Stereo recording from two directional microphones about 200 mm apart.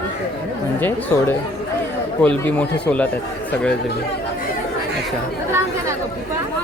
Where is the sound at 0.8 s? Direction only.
10° left (ahead or behind).